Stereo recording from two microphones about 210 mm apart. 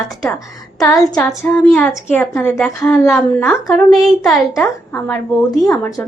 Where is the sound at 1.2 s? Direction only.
5° left (ahead or behind).